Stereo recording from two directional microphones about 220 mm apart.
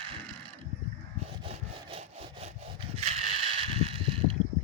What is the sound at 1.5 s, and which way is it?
Sawing, 30° right (ahead or behind).